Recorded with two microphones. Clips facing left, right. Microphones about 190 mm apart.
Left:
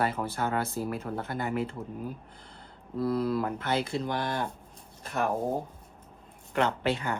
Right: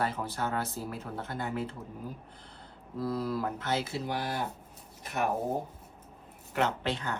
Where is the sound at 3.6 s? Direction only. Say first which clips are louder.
Left 3 dB; 60° left (ahead or behind).